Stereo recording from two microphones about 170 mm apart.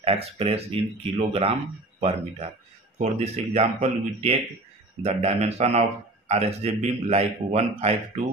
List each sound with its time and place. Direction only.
0.0 s a man's voice: 35° right (ahead or behind)